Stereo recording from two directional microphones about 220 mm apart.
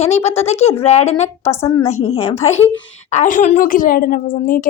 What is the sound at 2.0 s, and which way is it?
A woman's voice, 30° left (ahead or behind).